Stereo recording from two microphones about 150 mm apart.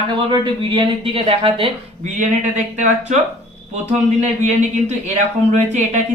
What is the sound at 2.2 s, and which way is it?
A woman's voice, 50° right (ahead or behind).